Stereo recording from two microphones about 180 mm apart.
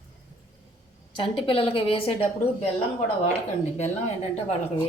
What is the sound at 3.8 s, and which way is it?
Speech, 35° left (ahead or behind).